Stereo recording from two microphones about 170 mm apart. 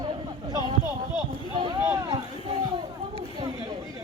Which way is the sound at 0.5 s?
25° right (ahead or behind).